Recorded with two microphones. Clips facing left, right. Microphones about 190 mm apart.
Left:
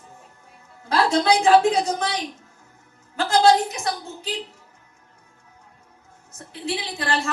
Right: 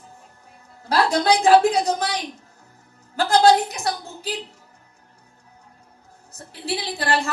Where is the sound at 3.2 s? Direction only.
35° right (ahead or behind).